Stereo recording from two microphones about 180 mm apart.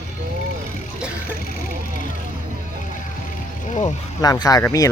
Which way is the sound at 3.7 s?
45° left (ahead or behind).